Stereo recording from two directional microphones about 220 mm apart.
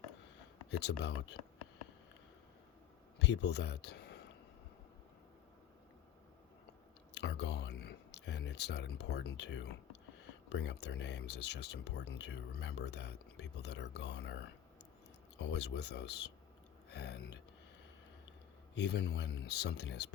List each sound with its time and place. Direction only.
0.7 s speech: 50° left (ahead or behind)
3.2 s speech: 50° left (ahead or behind)
7.1 s a sound: 50° left (ahead or behind)
10.5 s speech: 50° left (ahead or behind)
18.7 s speech: 50° left (ahead or behind)